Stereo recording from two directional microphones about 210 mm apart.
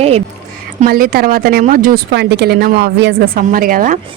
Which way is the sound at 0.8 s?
45° right (ahead or behind).